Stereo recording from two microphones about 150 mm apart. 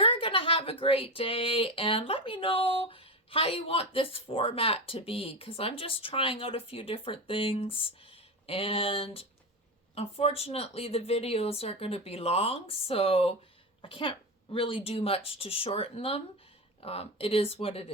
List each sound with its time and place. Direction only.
0.0 s speech: 35° left (ahead or behind)